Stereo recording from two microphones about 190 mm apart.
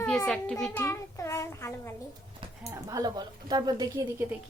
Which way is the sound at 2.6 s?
20° right (ahead or behind).